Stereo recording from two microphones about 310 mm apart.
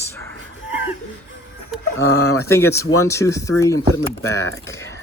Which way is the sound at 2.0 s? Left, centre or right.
Left.